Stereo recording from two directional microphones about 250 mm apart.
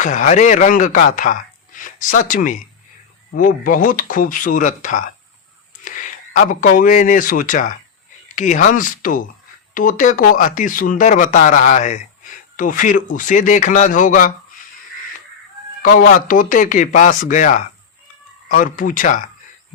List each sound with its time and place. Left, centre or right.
0.0 s speech: left
15.8 s speech: left